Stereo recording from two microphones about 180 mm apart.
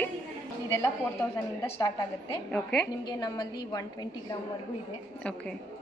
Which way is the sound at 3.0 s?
20° left (ahead or behind).